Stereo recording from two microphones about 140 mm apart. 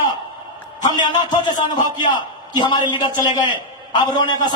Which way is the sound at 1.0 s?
30° left (ahead or behind).